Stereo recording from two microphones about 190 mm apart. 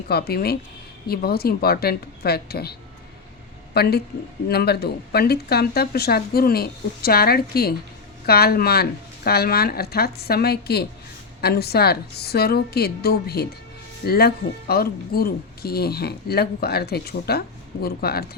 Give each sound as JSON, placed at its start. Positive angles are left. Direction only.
{"t": 0.1, "sound": "speech", "side_deg": 55}
{"t": 3.8, "sound": "speech", "side_deg": 55}